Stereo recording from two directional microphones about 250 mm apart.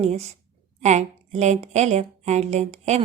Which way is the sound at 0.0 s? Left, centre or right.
Right.